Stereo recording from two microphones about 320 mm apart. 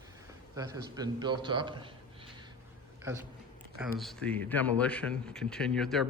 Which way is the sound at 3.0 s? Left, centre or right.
Centre.